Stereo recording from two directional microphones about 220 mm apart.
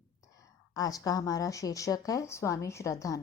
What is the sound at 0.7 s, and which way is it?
A woman's voice, 15° left (ahead or behind).